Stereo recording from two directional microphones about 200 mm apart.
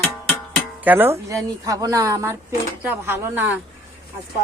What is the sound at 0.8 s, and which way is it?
A woman's voice, 10° right (ahead or behind).